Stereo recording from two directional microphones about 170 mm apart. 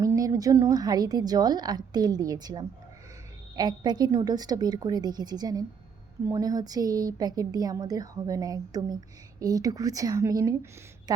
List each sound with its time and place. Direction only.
0.0 s a woman's voice: 20° right (ahead or behind)